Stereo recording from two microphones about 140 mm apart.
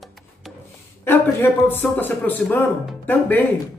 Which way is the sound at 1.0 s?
15° left (ahead or behind).